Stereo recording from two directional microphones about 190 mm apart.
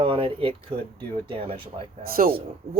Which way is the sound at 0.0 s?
30° right (ahead or behind).